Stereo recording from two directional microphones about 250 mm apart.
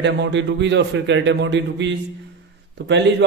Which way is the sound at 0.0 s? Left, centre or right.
Right.